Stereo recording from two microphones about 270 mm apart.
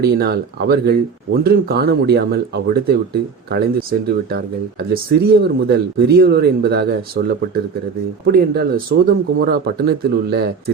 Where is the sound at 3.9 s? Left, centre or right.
Right.